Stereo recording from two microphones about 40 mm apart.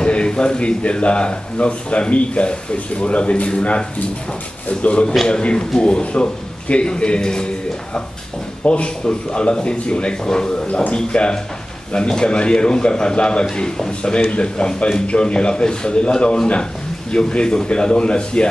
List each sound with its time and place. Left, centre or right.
0.0 s a man's voice: left
5.3 s a man's voice: left
8.6 s a man's voice: left